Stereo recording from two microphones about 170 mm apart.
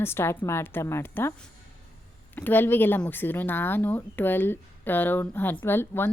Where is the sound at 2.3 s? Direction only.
10° left (ahead or behind).